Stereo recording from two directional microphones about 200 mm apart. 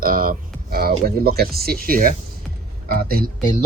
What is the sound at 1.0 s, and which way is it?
Speech, 50° right (ahead or behind).